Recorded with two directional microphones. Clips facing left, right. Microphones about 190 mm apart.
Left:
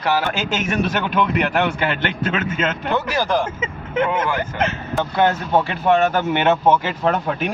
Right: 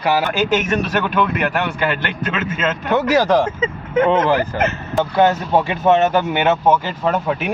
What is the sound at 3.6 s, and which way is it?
Speech, 30° right (ahead or behind).